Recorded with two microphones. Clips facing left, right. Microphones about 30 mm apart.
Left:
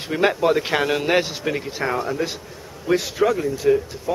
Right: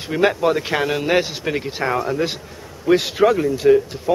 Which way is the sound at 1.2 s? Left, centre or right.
Centre.